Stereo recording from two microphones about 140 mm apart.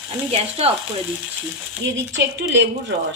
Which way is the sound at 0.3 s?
45° right (ahead or behind).